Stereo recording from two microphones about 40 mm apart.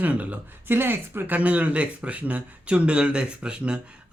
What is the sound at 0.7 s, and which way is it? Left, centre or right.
Speech, right.